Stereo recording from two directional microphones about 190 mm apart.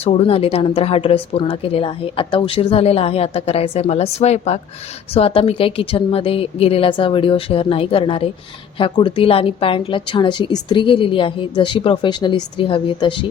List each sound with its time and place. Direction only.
0.0 s a woman's voice: 30° left (ahead or behind)